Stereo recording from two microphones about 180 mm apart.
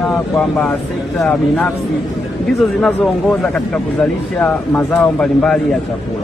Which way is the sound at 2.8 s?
Centre (ahead or behind).